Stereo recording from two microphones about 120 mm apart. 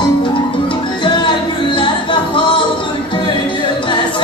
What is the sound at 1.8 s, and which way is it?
Music, 45° left (ahead or behind).